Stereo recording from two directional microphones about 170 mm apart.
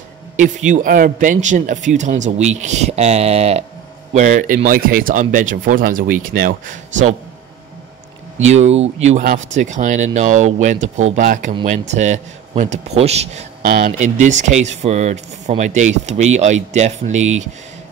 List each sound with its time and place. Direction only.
0.4 s speech: 45° right (ahead or behind)
8.5 s a man's voice: 40° right (ahead or behind)
13.7 s speech: 60° right (ahead or behind)
13.9 s speech: 45° right (ahead or behind)